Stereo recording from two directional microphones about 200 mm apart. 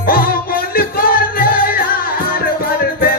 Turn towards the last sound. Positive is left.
turn(degrees=45)  # may be behind; listen again after turning